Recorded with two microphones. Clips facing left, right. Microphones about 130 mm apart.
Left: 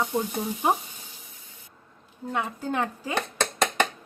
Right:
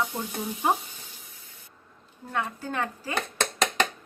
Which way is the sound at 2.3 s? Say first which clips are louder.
Left 2 dB; 15° left (ahead or behind).